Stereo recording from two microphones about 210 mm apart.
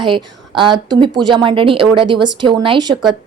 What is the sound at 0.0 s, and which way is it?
Speech, 25° right (ahead or behind).